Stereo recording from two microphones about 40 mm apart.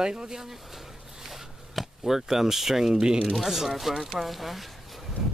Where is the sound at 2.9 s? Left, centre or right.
Centre.